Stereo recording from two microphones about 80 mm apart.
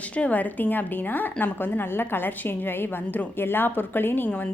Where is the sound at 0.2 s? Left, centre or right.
Centre.